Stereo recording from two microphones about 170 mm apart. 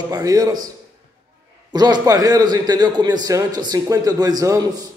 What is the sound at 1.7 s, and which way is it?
A man's voice, 25° right (ahead or behind).